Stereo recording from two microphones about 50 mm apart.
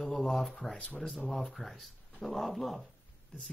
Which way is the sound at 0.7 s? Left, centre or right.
Left.